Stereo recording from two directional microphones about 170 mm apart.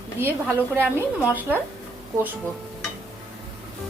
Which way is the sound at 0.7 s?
10° right (ahead or behind).